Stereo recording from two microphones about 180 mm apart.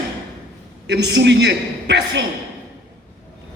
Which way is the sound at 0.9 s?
70° right (ahead or behind).